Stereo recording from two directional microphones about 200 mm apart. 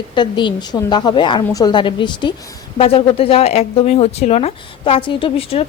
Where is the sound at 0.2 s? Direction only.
25° left (ahead or behind).